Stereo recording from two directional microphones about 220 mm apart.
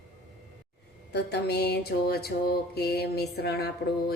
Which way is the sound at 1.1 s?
50° left (ahead or behind).